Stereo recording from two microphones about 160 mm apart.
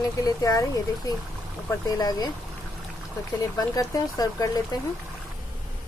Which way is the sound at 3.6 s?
20° left (ahead or behind).